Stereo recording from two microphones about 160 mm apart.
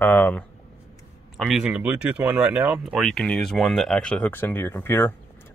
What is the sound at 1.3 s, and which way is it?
Speech, 5° right (ahead or behind).